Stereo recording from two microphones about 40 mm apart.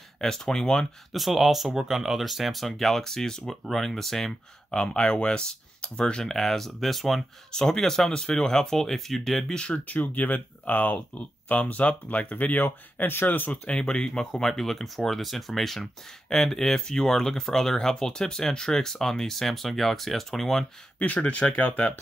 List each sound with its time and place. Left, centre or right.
0.2 s speech: centre
1.1 s speech: centre
4.6 s speech: left
6.3 s speech: centre
7.5 s speech: centre
9.6 s speech: left
9.9 s speech: left
12.6 s speech: left
13.7 s speech: left
14.5 s speech: centre
21.0 s speech: left